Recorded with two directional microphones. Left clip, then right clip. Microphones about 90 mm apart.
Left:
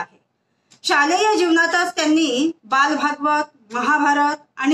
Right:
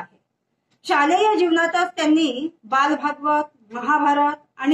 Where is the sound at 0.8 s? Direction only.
30° left (ahead or behind).